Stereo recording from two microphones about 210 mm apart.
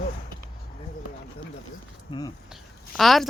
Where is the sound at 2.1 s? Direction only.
20° left (ahead or behind).